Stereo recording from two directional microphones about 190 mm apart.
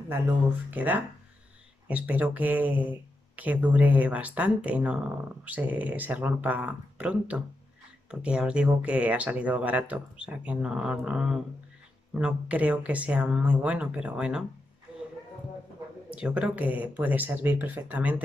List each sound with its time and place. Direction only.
0.1 s speech: 10° right (ahead or behind)
16.2 s speech: 5° right (ahead or behind)